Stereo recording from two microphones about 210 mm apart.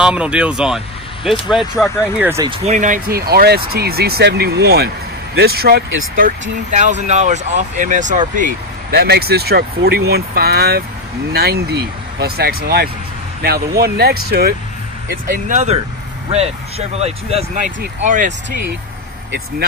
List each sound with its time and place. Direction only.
0.0 s speech: 5° right (ahead or behind)
2.4 s speech: 30° right (ahead or behind); by 6.3 s 45° right (ahead or behind)
6.7 s speech: 35° right (ahead or behind)
15.2 s speech: 40° right (ahead or behind)